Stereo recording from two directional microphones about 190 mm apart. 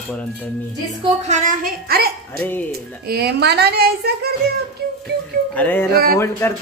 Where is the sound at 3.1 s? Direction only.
55° right (ahead or behind).